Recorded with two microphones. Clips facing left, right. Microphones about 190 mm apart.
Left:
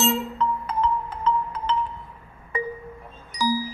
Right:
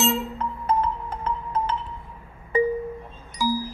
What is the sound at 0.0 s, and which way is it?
Music, centre (ahead or behind).